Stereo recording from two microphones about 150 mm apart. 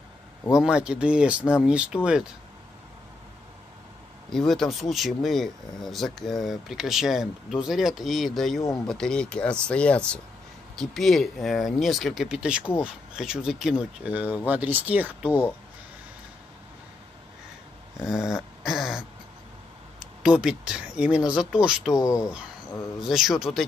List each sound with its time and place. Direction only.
0.5 s speech: 5° right (ahead or behind)
4.3 s speech: centre (ahead or behind)
17.9 s speech: 5° right (ahead or behind)
18.6 s a sound: 5° right (ahead or behind)
20.0 s speech: 5° right (ahead or behind)
21.9 s speech: 20° left (ahead or behind)
22.9 s speech: centre (ahead or behind)